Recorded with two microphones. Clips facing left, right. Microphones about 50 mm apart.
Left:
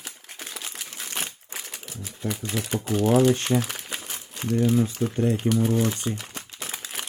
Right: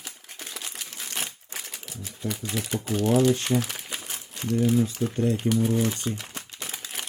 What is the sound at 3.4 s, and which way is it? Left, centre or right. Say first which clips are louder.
Speech: left 1 dB; left.